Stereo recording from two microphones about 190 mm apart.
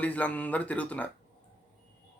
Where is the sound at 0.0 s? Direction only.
5° left (ahead or behind).